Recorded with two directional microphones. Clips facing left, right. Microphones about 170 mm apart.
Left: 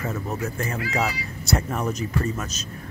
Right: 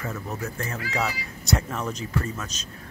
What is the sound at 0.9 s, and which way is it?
Speech, 5° left (ahead or behind).